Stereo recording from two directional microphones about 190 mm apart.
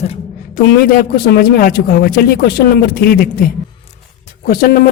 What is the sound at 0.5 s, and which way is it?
A man's voice, 50° left (ahead or behind).